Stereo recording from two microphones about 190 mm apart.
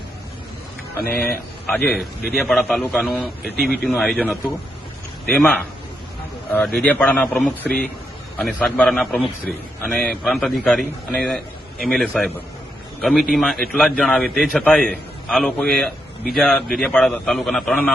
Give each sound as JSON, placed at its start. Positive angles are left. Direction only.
{"t": 1.0, "sound": "speech", "side_deg": 50}
{"t": 1.6, "sound": "a man's voice", "side_deg": 0}
{"t": 6.7, "sound": "a man's voice", "side_deg": 10}